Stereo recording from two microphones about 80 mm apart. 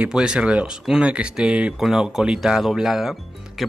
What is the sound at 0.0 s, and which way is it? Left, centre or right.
Speech, centre.